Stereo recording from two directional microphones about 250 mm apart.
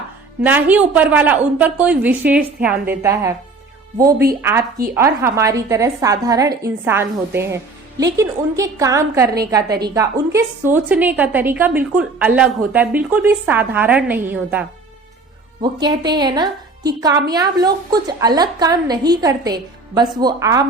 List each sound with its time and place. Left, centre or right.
0.4 s a woman's voice: centre
4.4 s a woman's voice: centre
15.6 s a woman's voice: centre